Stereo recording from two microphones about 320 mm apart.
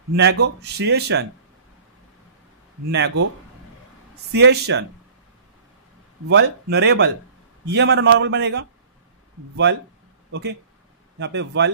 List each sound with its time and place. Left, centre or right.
0.1 s speech: right
2.9 s speech: right
4.3 s speech: right
6.2 s speech: right
10.3 s speech: right